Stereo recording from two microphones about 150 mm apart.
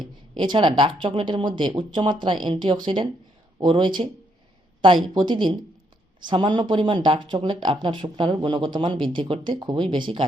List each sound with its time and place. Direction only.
0.3 s speech: 30° right (ahead or behind)